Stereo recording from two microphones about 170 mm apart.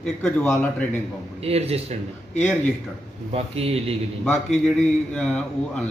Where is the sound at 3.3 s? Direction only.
35° right (ahead or behind).